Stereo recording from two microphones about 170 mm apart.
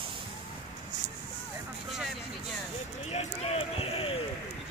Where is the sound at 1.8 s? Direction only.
Centre (ahead or behind).